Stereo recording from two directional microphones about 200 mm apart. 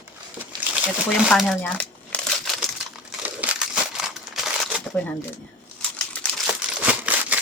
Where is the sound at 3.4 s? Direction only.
5° right (ahead or behind).